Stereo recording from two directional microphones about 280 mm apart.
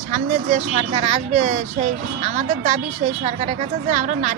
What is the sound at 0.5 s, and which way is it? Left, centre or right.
Speech, right.